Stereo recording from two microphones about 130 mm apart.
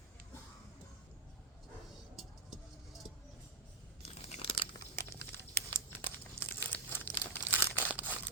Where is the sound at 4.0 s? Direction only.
55° left (ahead or behind).